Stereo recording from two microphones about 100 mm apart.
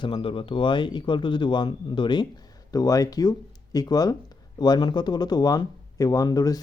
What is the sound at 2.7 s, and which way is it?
Speech, 35° left (ahead or behind).